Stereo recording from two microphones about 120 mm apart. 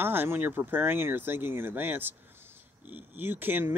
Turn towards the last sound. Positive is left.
turn(degrees=-15)  # may be behind; listen again after turning